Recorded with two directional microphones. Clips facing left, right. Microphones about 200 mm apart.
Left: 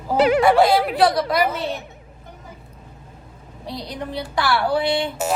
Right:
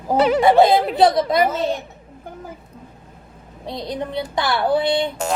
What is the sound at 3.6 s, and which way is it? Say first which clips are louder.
Speech: right 3 dB; 20° right (ahead or behind).